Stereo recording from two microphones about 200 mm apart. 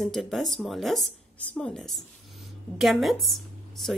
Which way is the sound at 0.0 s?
Centre (ahead or behind).